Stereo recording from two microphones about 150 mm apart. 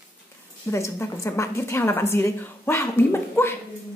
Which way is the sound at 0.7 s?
20° left (ahead or behind).